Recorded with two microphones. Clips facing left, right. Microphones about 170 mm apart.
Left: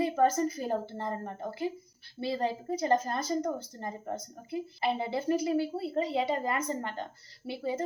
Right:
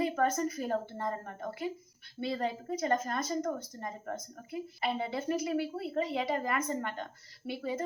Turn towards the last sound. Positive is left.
turn(degrees=30)  # may be behind; listen again after turning